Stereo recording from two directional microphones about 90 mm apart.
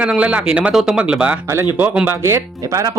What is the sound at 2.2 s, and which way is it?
Speech, 30° right (ahead or behind).